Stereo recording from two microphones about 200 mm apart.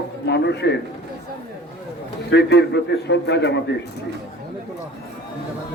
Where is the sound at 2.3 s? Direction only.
60° left (ahead or behind).